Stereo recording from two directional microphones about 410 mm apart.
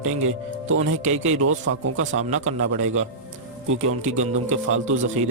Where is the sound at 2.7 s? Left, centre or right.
Centre.